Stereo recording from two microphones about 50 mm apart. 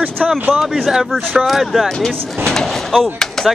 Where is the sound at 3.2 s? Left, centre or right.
Centre.